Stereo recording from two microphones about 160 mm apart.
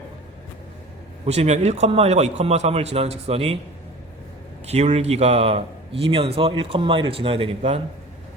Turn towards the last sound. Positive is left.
turn(degrees=-35)  # may be behind; listen again after turning